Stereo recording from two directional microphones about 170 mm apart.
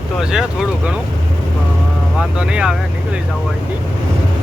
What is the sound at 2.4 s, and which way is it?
Speech, 5° right (ahead or behind).